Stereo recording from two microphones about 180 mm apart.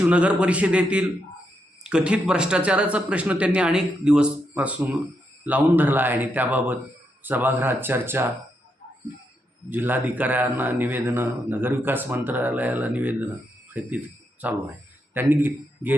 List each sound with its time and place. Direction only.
0.0 s speech: 5° right (ahead or behind)
9.6 s a man's voice: 10° right (ahead or behind)